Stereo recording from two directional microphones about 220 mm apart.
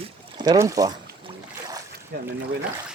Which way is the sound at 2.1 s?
45° right (ahead or behind).